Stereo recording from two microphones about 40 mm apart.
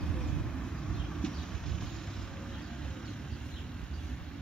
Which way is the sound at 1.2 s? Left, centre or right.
Centre.